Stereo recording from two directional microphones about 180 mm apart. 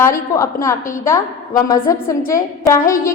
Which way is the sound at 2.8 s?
50° left (ahead or behind).